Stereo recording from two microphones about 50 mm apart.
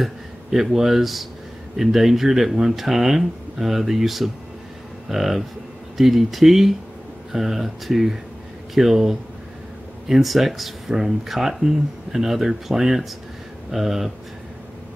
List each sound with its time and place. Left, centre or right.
0.0 s speech: centre
5.0 s cattle: centre
5.9 s speech: centre